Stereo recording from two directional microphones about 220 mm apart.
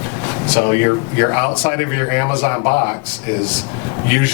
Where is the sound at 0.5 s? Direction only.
15° left (ahead or behind).